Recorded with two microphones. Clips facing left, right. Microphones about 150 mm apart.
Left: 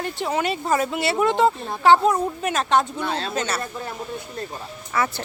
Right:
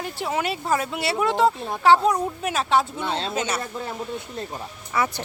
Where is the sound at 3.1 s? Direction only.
25° right (ahead or behind).